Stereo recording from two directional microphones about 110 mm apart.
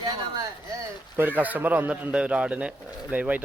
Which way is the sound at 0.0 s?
40° right (ahead or behind).